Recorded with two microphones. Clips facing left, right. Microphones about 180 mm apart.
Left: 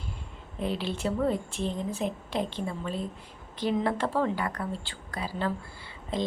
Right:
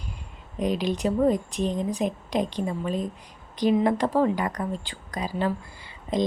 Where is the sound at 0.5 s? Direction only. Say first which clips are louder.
Right 6 dB; 15° right (ahead or behind).